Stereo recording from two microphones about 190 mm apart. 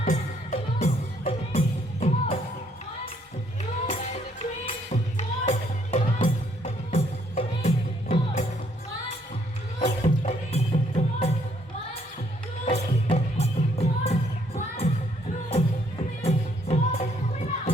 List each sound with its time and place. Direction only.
0.5 s music: 45° left (ahead or behind)
3.6 s music: 35° left (ahead or behind)
9.8 s music: 35° left (ahead or behind)
12.6 s music: 30° left (ahead or behind)
16.2 s music: 35° left (ahead or behind)